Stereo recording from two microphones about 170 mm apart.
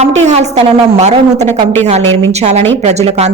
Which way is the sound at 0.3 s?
40° right (ahead or behind).